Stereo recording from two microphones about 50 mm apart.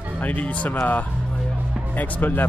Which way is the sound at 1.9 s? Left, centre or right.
Left.